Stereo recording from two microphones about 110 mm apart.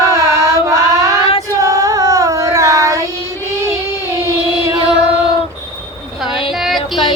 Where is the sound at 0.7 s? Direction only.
30° right (ahead or behind).